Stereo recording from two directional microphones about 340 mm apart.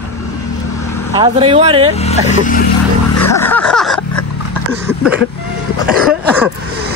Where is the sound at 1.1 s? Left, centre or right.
Centre.